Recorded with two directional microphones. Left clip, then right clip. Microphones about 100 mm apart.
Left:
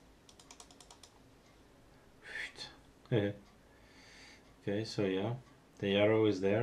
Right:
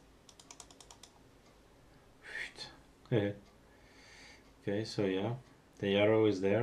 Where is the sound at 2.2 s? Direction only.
Centre (ahead or behind).